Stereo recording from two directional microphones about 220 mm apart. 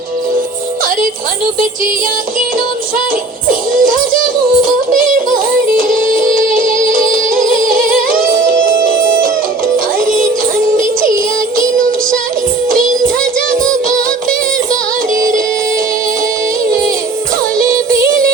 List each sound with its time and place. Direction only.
3.5 s music: 40° right (ahead or behind)
9.7 s music: 35° right (ahead or behind)
15.1 s music: 35° right (ahead or behind)